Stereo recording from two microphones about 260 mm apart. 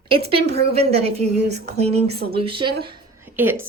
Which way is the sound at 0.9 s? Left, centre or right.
Right.